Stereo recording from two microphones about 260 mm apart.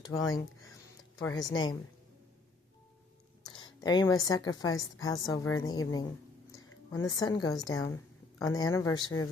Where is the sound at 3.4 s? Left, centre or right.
Centre.